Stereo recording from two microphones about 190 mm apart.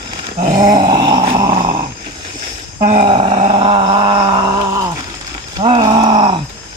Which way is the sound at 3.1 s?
35° right (ahead or behind).